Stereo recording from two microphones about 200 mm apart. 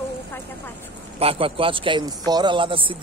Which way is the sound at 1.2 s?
30° right (ahead or behind).